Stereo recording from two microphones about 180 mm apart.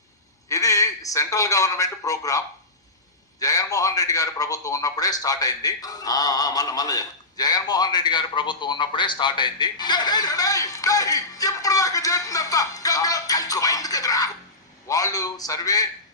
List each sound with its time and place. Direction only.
0.4 s a man's voice: 20° left (ahead or behind)
3.4 s a man's voice: 20° left (ahead or behind)